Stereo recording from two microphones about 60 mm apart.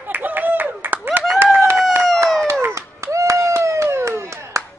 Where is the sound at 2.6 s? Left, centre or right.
Right.